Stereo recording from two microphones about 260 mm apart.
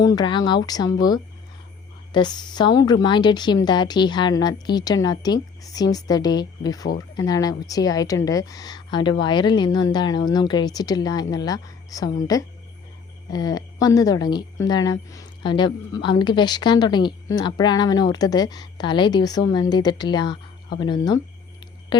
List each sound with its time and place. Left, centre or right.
0.0 s a woman's voice: centre
13.3 s a woman's voice: centre